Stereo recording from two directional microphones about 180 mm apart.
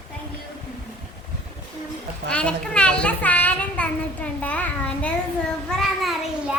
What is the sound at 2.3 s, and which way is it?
Child singing, 5° left (ahead or behind).